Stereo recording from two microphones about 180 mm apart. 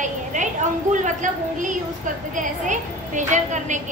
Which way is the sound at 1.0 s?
45° right (ahead or behind).